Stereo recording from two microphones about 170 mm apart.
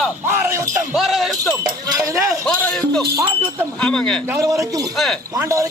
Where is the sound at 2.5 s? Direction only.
5° left (ahead or behind).